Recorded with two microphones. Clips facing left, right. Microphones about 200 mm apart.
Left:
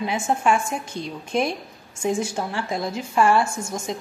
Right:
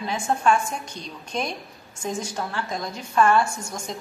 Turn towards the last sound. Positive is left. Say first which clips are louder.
# left 4 dB
turn(degrees=25)  # may be behind; listen again after turning